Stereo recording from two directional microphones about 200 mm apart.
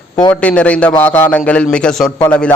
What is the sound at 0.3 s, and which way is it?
A man's voice, 5° left (ahead or behind).